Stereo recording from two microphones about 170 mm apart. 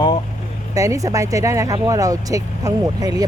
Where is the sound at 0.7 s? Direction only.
20° right (ahead or behind).